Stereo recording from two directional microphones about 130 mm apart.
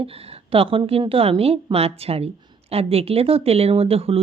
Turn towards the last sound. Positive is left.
turn(degrees=-50)  # may be behind; listen again after turning